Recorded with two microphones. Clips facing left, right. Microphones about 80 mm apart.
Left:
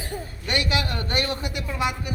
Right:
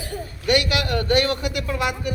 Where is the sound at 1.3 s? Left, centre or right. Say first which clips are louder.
Right 5 dB; right.